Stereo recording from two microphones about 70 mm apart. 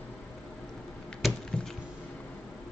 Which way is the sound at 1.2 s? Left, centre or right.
Centre.